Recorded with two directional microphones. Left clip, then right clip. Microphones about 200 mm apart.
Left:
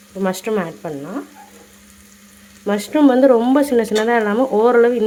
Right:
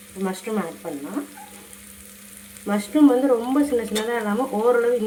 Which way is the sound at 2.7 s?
55° left (ahead or behind).